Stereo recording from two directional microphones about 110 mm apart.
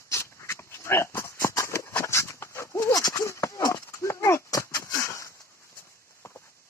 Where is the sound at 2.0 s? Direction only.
25° left (ahead or behind).